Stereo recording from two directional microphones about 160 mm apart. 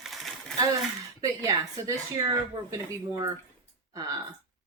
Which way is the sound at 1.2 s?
20° right (ahead or behind).